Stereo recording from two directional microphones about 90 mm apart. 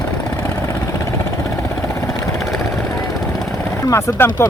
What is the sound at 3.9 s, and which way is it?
Speech, 30° left (ahead or behind).